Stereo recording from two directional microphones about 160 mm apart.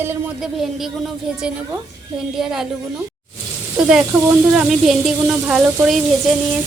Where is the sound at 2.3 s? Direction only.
Centre (ahead or behind).